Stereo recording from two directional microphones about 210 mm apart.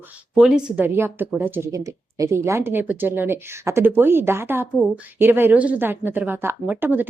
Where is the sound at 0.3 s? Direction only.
5° right (ahead or behind).